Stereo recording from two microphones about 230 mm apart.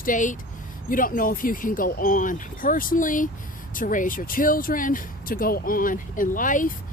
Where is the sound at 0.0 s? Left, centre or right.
Left.